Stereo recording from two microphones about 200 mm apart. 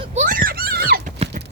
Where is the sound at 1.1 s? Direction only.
35° right (ahead or behind).